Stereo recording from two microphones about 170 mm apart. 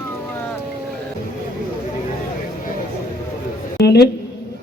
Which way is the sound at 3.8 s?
75° left (ahead or behind).